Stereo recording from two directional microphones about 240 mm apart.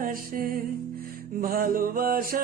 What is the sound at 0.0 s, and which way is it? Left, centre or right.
Music, right.